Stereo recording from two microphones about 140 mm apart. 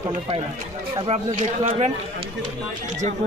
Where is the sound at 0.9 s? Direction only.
45° right (ahead or behind).